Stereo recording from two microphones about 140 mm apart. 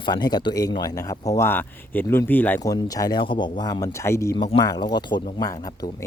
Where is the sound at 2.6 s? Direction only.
25° left (ahead or behind).